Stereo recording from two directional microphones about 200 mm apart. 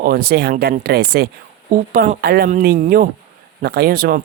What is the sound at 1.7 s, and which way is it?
A woman's voice, 40° right (ahead or behind).